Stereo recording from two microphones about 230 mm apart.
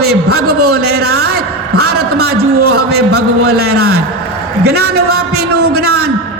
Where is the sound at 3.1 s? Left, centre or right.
Right.